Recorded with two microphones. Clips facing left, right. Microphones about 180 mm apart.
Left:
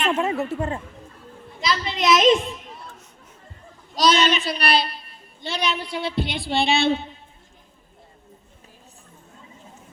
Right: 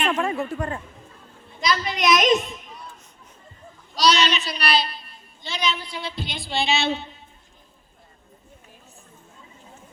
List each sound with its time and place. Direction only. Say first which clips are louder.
0.0 s speech: left 1 dB; 25° left (ahead or behind)
1.6 s a child's voice: even; 25° left (ahead or behind)
3.9 s speech: left 2 dB; 50° left (ahead or behind)